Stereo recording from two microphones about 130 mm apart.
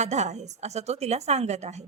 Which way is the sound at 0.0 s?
60° right (ahead or behind).